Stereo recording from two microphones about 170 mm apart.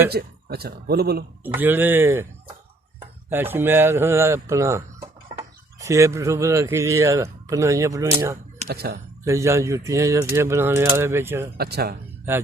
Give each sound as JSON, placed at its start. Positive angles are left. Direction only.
{"t": 0.1, "sound": "a man's voice", "side_deg": -65}
{"t": 1.5, "sound": "speech", "side_deg": -10}
{"t": 3.2, "sound": "speech", "side_deg": -10}
{"t": 8.6, "sound": "a man's voice", "side_deg": -70}
{"t": 9.2, "sound": "speech", "side_deg": -15}
{"t": 11.5, "sound": "a man's voice", "side_deg": -70}